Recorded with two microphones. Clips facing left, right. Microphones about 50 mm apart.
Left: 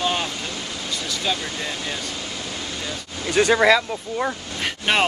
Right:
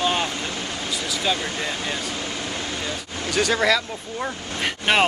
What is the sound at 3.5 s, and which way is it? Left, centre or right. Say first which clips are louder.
Speech: left 5 dB; centre.